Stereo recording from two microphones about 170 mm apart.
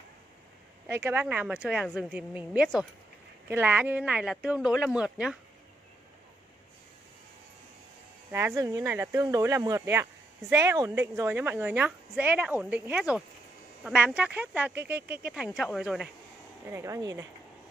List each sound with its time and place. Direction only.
0.8 s a woman's voice: 15° right (ahead or behind)
8.3 s a woman's voice: 15° right (ahead or behind)
16.7 s a woman's voice: 15° right (ahead or behind)